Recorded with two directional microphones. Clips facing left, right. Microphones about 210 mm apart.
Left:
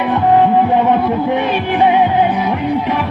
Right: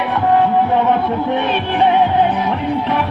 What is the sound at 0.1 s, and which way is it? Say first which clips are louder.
Music: left 3 dB; 15° left (ahead or behind).